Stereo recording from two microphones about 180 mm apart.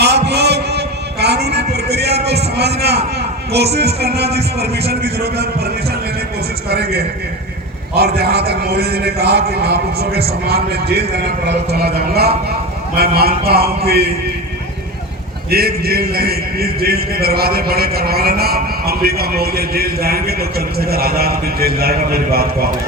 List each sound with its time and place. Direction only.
0.0 s a sound: 65° right (ahead or behind)
3.8 s a man's voice: 65° right (ahead or behind)
15.4 s a man's voice: 60° right (ahead or behind)